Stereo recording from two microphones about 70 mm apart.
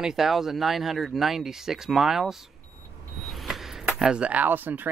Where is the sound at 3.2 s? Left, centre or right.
Centre.